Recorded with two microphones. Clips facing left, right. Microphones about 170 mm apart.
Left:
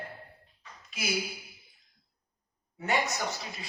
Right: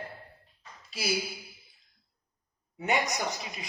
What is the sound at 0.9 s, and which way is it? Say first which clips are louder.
Speech: right 2 dB; 35° right (ahead or behind).